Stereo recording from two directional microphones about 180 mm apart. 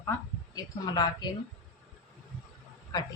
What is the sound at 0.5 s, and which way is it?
Speech, 25° left (ahead or behind).